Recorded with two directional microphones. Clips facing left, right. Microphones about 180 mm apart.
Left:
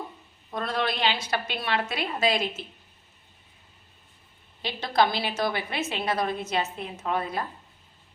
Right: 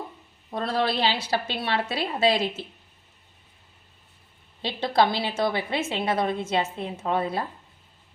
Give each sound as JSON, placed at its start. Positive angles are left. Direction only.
{"t": 0.5, "sound": "a woman's voice", "side_deg": -30}
{"t": 4.6, "sound": "a woman's voice", "side_deg": -30}